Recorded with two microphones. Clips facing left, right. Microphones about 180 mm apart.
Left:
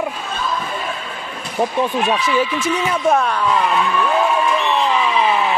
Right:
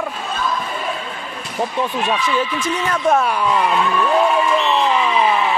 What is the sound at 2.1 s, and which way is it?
Speech, 10° left (ahead or behind).